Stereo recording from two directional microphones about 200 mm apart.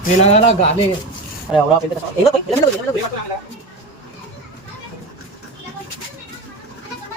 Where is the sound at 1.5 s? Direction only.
5° right (ahead or behind).